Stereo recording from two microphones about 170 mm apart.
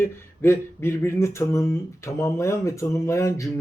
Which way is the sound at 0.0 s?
15° left (ahead or behind).